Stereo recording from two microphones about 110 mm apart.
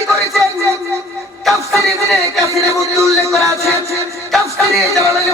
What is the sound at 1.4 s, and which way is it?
A man's voice, centre (ahead or behind).